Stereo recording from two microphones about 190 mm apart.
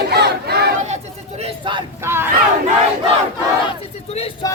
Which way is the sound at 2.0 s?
10° right (ahead or behind).